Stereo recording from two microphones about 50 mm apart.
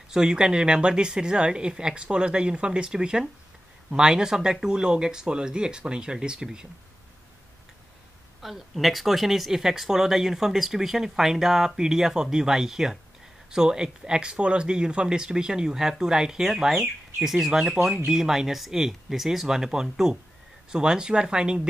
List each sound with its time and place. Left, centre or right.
0.1 s speech: centre
8.4 s speech: centre